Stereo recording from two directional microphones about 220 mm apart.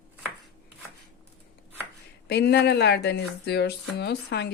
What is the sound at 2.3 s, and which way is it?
Speech, 50° left (ahead or behind).